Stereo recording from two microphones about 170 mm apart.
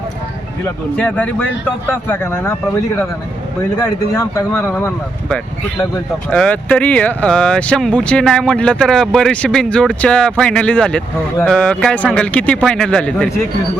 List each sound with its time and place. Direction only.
0.9 s speech: 10° left (ahead or behind)
3.8 s speech: 20° left (ahead or behind)
6.3 s speech: 5° left (ahead or behind)